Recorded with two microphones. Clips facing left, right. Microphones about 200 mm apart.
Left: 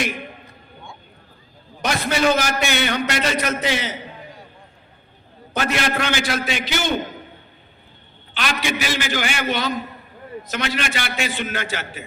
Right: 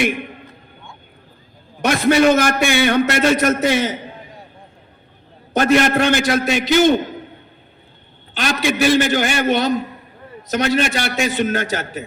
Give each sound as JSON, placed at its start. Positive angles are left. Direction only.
{"t": 1.8, "sound": "a sound", "side_deg": -55}
{"t": 2.2, "sound": "a man's voice", "side_deg": -50}
{"t": 5.8, "sound": "a man's voice", "side_deg": -45}
{"t": 8.3, "sound": "a man's voice", "side_deg": -45}